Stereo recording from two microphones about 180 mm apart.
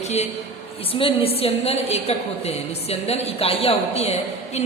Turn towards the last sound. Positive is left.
turn(degrees=35)  # may be behind; listen again after turning